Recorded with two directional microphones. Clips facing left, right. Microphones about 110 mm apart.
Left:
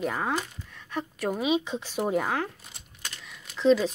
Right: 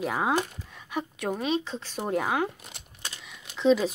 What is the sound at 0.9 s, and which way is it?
Speech, centre (ahead or behind).